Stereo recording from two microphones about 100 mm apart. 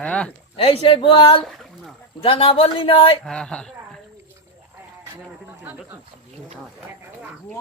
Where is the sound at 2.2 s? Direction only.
70° left (ahead or behind).